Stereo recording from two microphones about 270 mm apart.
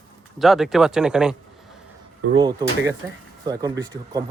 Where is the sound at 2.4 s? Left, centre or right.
Centre.